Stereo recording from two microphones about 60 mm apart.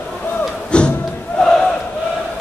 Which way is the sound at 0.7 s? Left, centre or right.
Centre.